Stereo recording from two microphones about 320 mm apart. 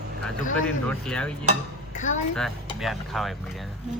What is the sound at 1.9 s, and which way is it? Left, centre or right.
Speech, left.